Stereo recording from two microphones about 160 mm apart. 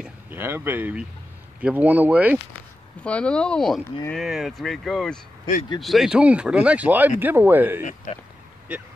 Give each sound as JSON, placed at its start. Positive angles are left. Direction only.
{"t": 0.0, "sound": "a sound", "side_deg": -15}
{"t": 1.6, "sound": "speech", "side_deg": -10}
{"t": 3.0, "sound": "speech", "side_deg": 5}
{"t": 7.8, "sound": "speech", "side_deg": 50}